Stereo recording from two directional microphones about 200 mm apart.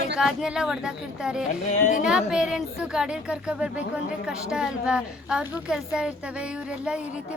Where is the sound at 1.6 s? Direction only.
40° left (ahead or behind).